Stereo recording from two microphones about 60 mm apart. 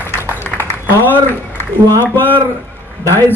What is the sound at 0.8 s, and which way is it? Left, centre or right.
Speech, right.